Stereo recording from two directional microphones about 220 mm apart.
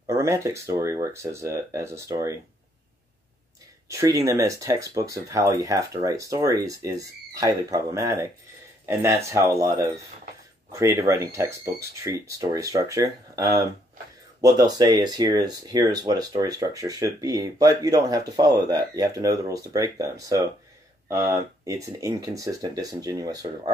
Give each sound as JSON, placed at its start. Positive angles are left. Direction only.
{"t": 0.1, "sound": "speech", "side_deg": -15}
{"t": 3.9, "sound": "speech", "side_deg": -15}